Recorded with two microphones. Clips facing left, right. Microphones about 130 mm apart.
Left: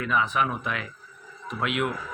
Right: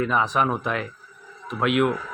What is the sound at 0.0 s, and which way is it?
Speech, 35° right (ahead or behind).